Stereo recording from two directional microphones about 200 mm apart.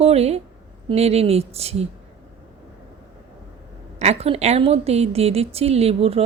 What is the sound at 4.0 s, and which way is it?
A woman's voice, 30° right (ahead or behind).